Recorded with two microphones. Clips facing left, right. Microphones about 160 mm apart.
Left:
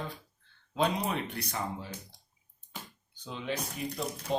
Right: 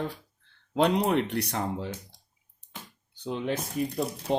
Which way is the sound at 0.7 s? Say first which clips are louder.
Right 7 dB; 65° right (ahead or behind).